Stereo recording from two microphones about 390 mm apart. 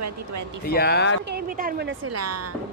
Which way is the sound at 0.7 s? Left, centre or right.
Left.